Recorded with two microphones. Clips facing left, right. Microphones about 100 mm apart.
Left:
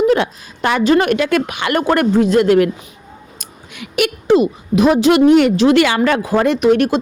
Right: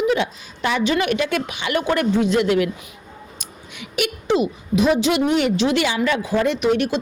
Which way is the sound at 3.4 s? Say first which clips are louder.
Left 3 dB; 55° left (ahead or behind).